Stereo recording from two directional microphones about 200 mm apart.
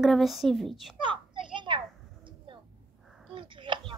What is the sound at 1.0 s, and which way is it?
Children playing, 25° right (ahead or behind).